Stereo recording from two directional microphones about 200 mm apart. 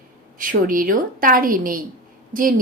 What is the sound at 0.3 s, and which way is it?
A woman's voice, 45° right (ahead or behind).